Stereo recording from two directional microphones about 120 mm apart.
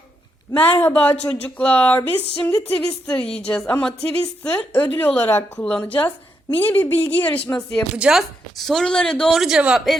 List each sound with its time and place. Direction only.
0.5 s a woman's voice: 15° left (ahead or behind)
7.9 s speech: 5° right (ahead or behind)